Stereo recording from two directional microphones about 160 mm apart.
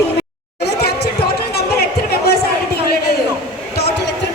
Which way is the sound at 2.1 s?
80° left.